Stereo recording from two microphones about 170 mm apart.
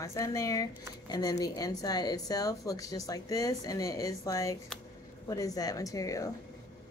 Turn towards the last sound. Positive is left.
turn(degrees=20)  # may be behind; listen again after turning